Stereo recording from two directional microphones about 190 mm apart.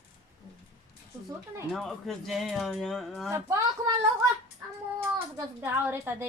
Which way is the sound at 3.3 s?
15° right (ahead or behind).